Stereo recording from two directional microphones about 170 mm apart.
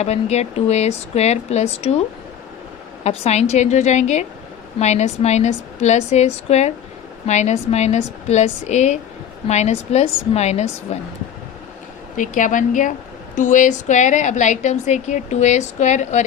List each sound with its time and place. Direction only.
0.0 s a woman's voice: 40° left (ahead or behind)
3.0 s a woman's voice: 40° left (ahead or behind)
12.1 s a woman's voice: 50° left (ahead or behind)